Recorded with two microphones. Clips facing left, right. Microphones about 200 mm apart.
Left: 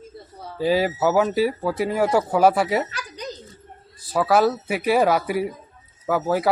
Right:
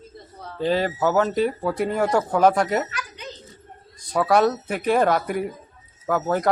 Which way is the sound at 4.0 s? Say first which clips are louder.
Even; 5° left (ahead or behind).